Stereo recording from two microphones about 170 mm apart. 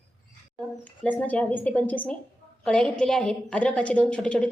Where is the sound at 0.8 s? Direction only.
10° left (ahead or behind).